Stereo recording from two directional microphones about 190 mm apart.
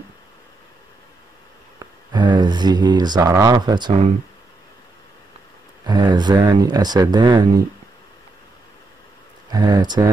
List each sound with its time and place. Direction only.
2.1 s speech: 25° right (ahead or behind)
5.9 s speech: 20° right (ahead or behind)
9.5 s speech: 20° right (ahead or behind)